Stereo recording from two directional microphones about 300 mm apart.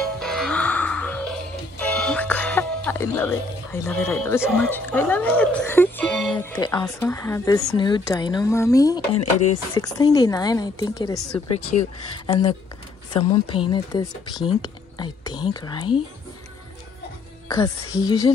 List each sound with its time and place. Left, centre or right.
0.2 s music: centre
1.8 s speech: centre
9.1 s a sound: left
9.8 s speech: centre
18.0 s speech: centre